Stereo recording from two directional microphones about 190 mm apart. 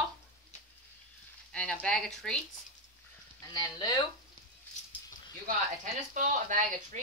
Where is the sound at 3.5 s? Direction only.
20° left (ahead or behind).